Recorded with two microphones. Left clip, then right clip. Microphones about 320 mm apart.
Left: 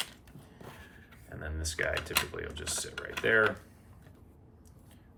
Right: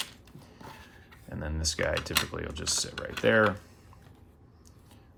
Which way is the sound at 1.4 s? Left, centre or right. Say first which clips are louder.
Right 4 dB; centre.